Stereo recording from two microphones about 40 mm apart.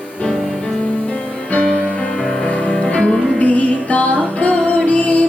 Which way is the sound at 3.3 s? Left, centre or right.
Left.